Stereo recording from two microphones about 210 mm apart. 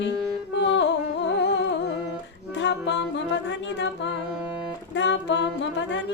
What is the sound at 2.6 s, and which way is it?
Music, 60° left (ahead or behind).